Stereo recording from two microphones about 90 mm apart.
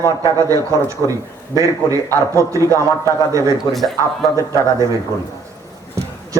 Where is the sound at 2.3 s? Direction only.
35° right (ahead or behind).